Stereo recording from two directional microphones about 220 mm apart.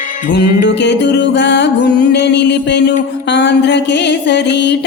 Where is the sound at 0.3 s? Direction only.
55° left (ahead or behind).